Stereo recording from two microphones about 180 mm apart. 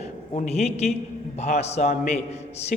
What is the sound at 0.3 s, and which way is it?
A man's voice, 35° left (ahead or behind).